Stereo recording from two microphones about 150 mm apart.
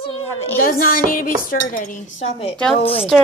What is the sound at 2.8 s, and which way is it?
Speech, 40° left (ahead or behind).